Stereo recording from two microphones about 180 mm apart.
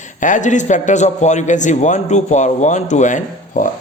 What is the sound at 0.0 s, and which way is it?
A man's voice, 45° left (ahead or behind).